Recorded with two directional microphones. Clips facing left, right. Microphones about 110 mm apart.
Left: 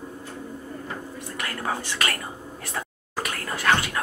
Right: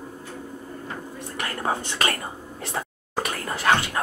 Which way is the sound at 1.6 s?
25° right (ahead or behind).